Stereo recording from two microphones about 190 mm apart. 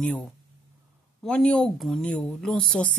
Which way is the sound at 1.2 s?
5° left (ahead or behind).